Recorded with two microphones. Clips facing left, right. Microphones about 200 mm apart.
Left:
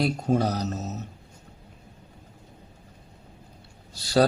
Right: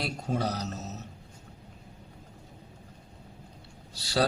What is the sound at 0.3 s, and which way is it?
Speech, 45° left (ahead or behind).